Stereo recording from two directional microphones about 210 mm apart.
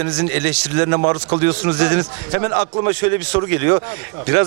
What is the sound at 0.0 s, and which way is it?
Speech, 10° right (ahead or behind).